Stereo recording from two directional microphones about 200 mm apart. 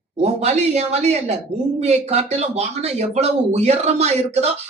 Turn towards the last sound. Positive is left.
turn(degrees=-35)  # may be behind; listen again after turning